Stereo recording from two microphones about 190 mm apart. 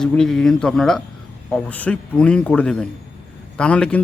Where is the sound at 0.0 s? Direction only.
5° left (ahead or behind).